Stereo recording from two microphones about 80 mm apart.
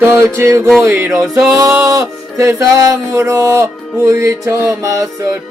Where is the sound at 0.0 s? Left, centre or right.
Right.